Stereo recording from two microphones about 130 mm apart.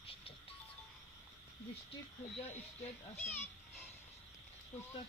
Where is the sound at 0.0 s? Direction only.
45° left (ahead or behind).